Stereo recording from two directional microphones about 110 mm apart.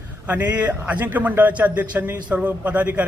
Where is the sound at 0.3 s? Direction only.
15° right (ahead or behind).